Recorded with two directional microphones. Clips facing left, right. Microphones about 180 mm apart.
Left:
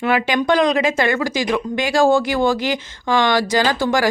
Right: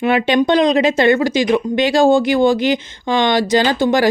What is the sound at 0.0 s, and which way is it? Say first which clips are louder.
Speech: right 4 dB; 25° right (ahead or behind).